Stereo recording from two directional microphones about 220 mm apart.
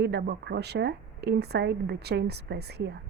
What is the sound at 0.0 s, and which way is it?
Speech, 50° right (ahead or behind).